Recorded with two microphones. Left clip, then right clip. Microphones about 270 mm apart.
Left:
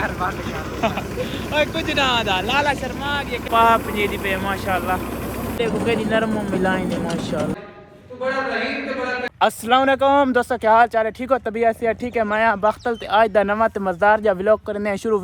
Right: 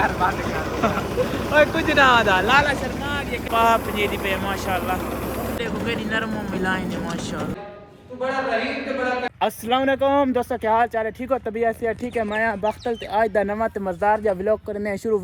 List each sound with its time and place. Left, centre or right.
0.0 s vehicle: centre
0.8 s speech: centre
9.4 s speech: centre